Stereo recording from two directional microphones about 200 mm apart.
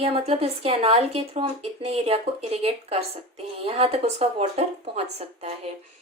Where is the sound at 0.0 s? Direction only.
30° right (ahead or behind).